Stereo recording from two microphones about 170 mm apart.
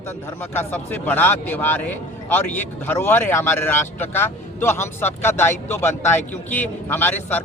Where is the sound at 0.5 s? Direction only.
10° left (ahead or behind).